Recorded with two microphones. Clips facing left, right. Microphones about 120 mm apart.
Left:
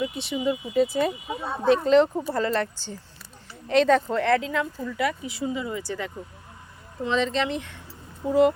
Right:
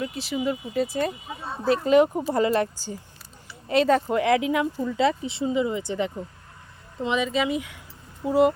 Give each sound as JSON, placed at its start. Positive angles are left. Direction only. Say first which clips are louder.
{"t": 0.0, "sound": "speech", "louder": "left 1 dB", "side_deg": 0}
{"t": 4.8, "sound": "speech", "louder": "right 4 dB", "side_deg": -25}